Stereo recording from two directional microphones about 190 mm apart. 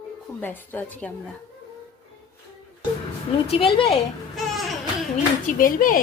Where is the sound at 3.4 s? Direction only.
30° left (ahead or behind).